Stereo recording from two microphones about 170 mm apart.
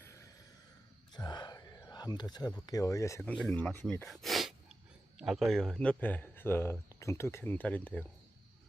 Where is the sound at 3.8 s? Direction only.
5° left (ahead or behind).